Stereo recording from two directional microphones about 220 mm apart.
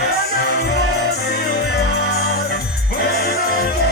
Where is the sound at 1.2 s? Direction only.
45° left (ahead or behind).